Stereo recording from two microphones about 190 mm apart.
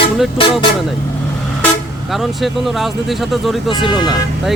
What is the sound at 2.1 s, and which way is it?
Speech, centre (ahead or behind).